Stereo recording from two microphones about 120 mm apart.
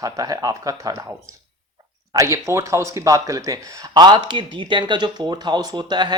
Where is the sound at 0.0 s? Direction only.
30° right (ahead or behind).